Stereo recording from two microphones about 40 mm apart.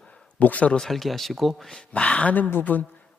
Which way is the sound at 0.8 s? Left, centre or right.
Centre.